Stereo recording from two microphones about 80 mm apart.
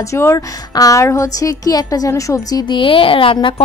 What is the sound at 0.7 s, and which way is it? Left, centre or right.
Speech, left.